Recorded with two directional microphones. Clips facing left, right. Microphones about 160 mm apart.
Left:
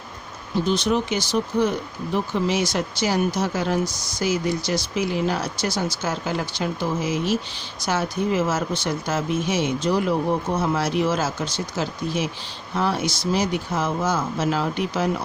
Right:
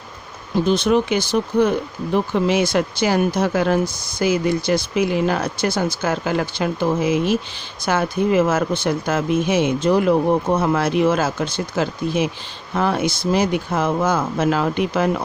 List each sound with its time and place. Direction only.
0.7 s speech: 55° right (ahead or behind)